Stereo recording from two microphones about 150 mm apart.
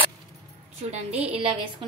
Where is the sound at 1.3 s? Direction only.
35° right (ahead or behind).